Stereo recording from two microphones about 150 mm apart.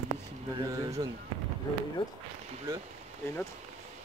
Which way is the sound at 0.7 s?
20° right (ahead or behind).